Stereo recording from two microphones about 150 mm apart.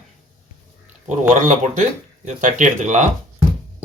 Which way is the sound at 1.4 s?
55° right (ahead or behind).